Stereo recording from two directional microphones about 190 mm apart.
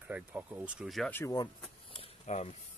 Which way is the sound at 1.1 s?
15° left (ahead or behind).